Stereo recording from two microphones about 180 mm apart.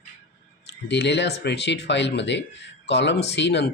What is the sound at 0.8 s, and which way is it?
A man's voice, 75° left (ahead or behind).